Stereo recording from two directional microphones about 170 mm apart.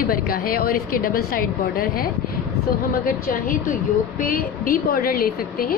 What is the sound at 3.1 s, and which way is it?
A woman's voice, 55° left (ahead or behind).